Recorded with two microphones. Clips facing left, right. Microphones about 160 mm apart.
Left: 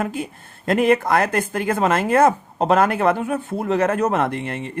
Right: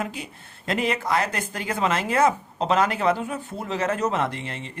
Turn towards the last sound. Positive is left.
turn(degrees=55)  # may be behind; listen again after turning